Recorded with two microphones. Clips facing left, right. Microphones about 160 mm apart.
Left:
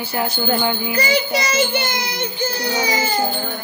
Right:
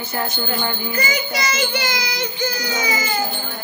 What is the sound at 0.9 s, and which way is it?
Child singing, 35° left (ahead or behind).